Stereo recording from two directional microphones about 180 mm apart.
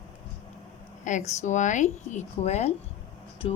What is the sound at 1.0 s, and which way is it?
Speech, 40° left (ahead or behind).